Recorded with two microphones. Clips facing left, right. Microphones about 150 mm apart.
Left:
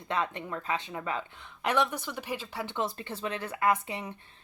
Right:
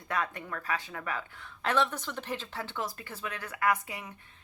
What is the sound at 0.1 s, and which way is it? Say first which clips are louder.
Speech: left 2 dB; 25° left (ahead or behind).